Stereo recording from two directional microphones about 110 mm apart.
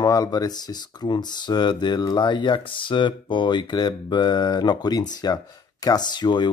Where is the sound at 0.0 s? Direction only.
35° left (ahead or behind).